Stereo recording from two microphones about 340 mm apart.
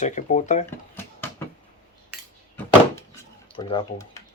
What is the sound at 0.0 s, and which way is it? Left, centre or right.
Speech, left.